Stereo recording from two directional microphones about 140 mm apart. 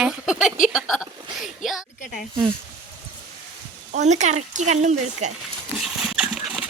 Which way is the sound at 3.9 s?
55° right (ahead or behind).